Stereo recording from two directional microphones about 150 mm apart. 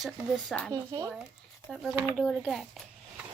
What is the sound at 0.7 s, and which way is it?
Speech, 25° right (ahead or behind).